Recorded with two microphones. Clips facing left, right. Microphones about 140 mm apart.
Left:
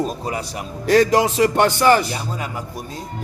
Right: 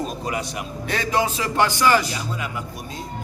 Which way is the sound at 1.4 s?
60° left (ahead or behind).